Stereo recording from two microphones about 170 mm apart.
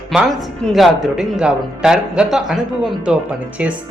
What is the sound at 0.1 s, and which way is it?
Speech, centre (ahead or behind).